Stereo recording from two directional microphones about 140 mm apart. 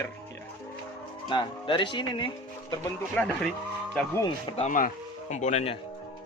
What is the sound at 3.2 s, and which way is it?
Speech, 10° left (ahead or behind).